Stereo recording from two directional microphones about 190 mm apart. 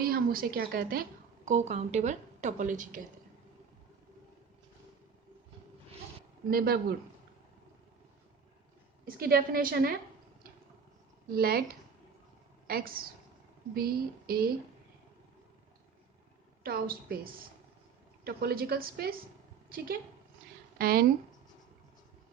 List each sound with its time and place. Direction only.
0.0 s speech: 50° right (ahead or behind)
1.5 s a woman's voice: 35° right (ahead or behind)
6.5 s a woman's voice: 50° right (ahead or behind)
9.0 s a woman's voice: 50° right (ahead or behind)
11.3 s a woman's voice: 50° right (ahead or behind)
12.6 s a woman's voice: 50° right (ahead or behind)
16.6 s a woman's voice: 50° right (ahead or behind)
18.3 s a woman's voice: 50° right (ahead or behind)
20.7 s a woman's voice: 50° right (ahead or behind)